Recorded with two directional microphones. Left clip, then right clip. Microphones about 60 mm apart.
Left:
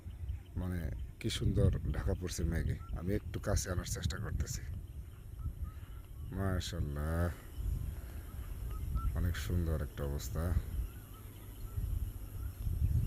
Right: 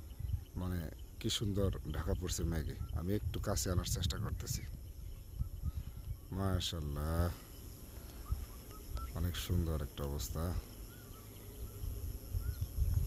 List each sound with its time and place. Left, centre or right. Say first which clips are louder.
0.5 s speech: left 1 dB; centre
6.3 s speech: right 1 dB; centre
9.1 s speech: even; centre